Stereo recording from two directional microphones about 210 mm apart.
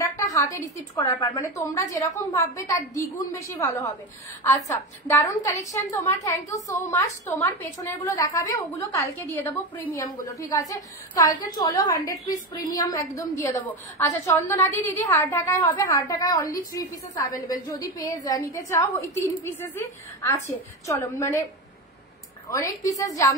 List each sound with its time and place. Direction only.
0.0 s a sound: 15° left (ahead or behind)
0.9 s a woman's voice: 15° left (ahead or behind)
22.5 s a woman's voice: 15° left (ahead or behind)